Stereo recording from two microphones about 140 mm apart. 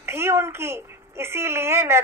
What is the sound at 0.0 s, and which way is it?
Speech, 20° right (ahead or behind).